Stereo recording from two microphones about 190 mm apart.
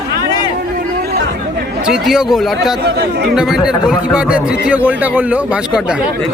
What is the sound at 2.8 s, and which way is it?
Speech, 60° right (ahead or behind).